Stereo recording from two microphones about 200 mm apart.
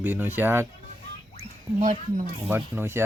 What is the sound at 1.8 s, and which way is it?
Speech, 40° right (ahead or behind).